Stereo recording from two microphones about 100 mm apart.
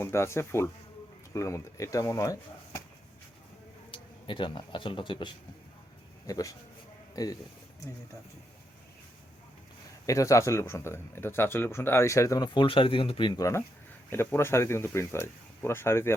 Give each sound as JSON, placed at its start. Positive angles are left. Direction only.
{"t": 0.0, "sound": "speech", "side_deg": 25}
{"t": 3.9, "sound": "speech", "side_deg": 55}
{"t": 6.2, "sound": "speech", "side_deg": 35}
{"t": 10.1, "sound": "speech", "side_deg": 30}
{"t": 12.5, "sound": "speech", "side_deg": 60}
{"t": 13.4, "sound": "speech", "side_deg": 30}